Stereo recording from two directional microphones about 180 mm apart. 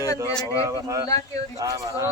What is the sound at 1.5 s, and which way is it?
Speech, 20° right (ahead or behind).